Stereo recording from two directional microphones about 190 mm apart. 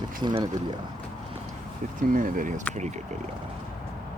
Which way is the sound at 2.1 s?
45° right (ahead or behind).